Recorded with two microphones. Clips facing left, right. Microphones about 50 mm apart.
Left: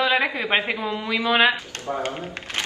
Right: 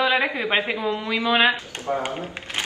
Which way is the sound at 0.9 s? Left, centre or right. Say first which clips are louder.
Right 1 dB; left.